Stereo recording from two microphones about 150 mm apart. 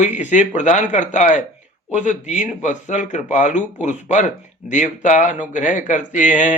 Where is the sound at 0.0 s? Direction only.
55° left (ahead or behind).